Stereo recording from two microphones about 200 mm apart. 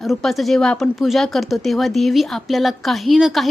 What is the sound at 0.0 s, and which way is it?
A woman's voice, centre (ahead or behind).